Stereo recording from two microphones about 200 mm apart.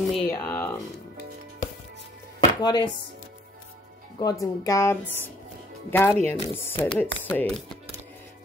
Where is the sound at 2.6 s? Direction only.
20° left (ahead or behind).